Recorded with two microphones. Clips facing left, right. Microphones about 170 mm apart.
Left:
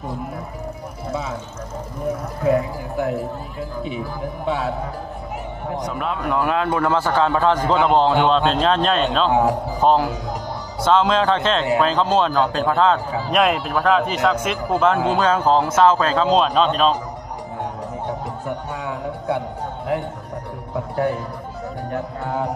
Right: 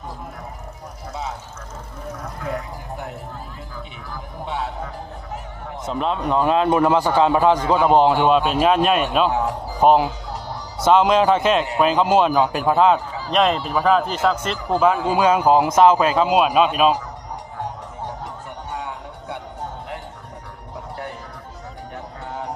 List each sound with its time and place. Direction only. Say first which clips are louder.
3.0 s speech: left 15 dB; 90° left
5.9 s a man's voice: right 4 dB; 25° right (ahead or behind)
13.3 s a man's voice: even; 5° left (ahead or behind)
20.7 s music: left 11 dB; 90° left
21.9 s speech: left 8 dB; 90° left